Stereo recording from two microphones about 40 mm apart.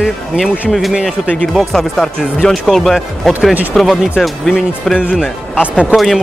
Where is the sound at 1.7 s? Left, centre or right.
Centre.